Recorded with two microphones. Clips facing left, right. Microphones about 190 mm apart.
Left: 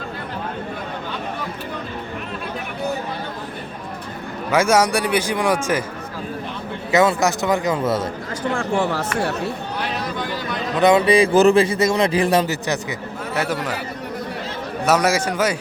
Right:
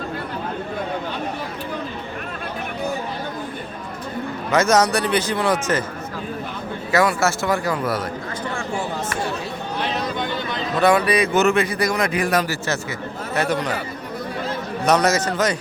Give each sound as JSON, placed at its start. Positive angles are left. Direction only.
{"t": 4.5, "sound": "a man's voice", "side_deg": 10}
{"t": 6.9, "sound": "speech", "side_deg": 20}
{"t": 8.5, "sound": "speech", "side_deg": 60}
{"t": 10.8, "sound": "speech", "side_deg": 20}
{"t": 13.3, "sound": "a man's voice", "side_deg": 5}
{"t": 14.8, "sound": "a man's voice", "side_deg": 10}